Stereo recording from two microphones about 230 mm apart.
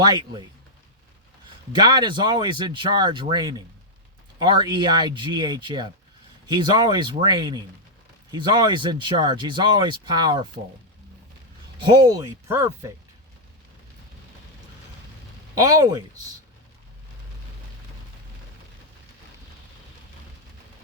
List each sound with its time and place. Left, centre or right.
0.0 s speech: centre
1.7 s speech: centre
11.8 s speech: centre
15.5 s speech: centre